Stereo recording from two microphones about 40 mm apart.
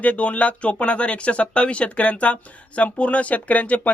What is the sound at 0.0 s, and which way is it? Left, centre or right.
Speech, left.